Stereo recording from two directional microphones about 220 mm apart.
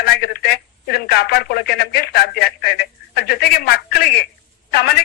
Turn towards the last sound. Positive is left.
turn(degrees=45)  # may be behind; listen again after turning